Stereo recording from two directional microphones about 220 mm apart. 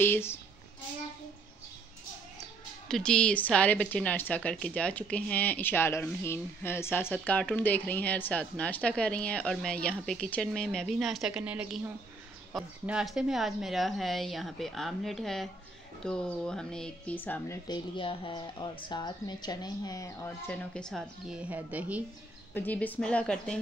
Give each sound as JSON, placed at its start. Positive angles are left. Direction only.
{"t": 0.0, "sound": "a woman's voice", "side_deg": 10}
{"t": 2.9, "sound": "a woman's voice", "side_deg": 5}
{"t": 17.6, "sound": "a woman's voice", "side_deg": 20}
{"t": 22.5, "sound": "a woman's voice", "side_deg": 10}